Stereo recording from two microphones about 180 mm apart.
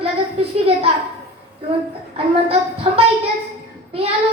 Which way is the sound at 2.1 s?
30° right (ahead or behind).